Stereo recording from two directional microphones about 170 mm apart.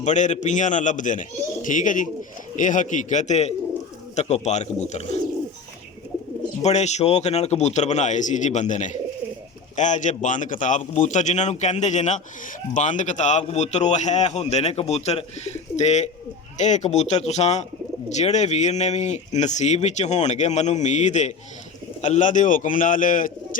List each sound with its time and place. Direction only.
0.0 s a man's voice: 45° left (ahead or behind)
6.6 s a man's voice: 40° left (ahead or behind)